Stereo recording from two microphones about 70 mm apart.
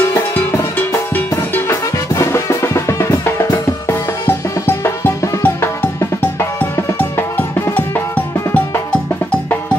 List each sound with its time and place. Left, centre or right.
1.7 s music: left